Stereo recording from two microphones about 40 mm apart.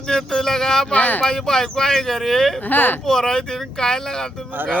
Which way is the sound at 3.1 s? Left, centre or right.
Centre.